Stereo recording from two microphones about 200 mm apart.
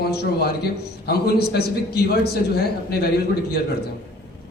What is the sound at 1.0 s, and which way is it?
A man's voice, 55° left (ahead or behind).